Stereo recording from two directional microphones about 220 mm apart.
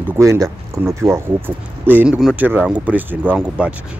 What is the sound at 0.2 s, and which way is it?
Speech, 15° right (ahead or behind).